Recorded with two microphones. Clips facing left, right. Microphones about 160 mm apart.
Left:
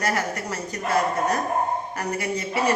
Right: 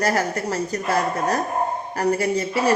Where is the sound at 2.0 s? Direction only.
35° right (ahead or behind).